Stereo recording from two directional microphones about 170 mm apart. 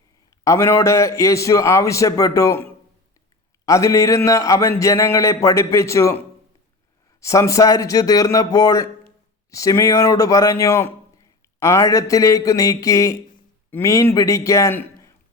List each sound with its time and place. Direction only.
0.4 s a man's voice: 15° left (ahead or behind)
3.7 s a man's voice: 20° left (ahead or behind)